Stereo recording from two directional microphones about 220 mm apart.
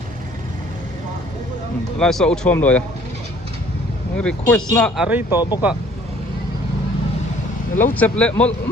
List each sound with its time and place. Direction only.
2.0 s speech: centre (ahead or behind)
4.2 s speech: 5° left (ahead or behind)
5.4 s speech: 20° left (ahead or behind)
7.8 s speech: 5° left (ahead or behind)